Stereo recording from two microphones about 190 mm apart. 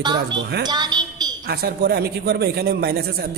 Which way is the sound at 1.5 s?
55° right (ahead or behind).